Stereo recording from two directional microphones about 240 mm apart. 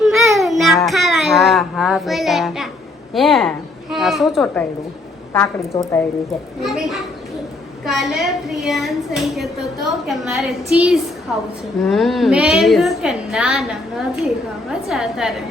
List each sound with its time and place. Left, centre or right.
0.0 s a sound: centre
3.2 s a woman's voice: centre
5.3 s a woman's voice: centre
6.6 s children playing: centre
7.9 s a woman's voice: centre